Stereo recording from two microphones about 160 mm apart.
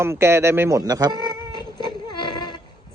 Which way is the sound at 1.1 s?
25° left (ahead or behind).